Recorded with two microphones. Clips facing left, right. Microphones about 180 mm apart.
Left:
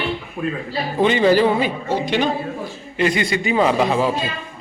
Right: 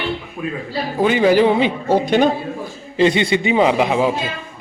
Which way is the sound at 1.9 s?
45° right (ahead or behind).